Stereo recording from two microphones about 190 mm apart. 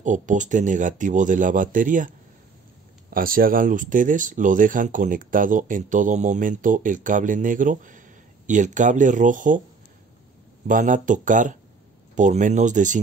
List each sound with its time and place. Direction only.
0.0 s speech: 40° right (ahead or behind)
10.7 s speech: 45° right (ahead or behind)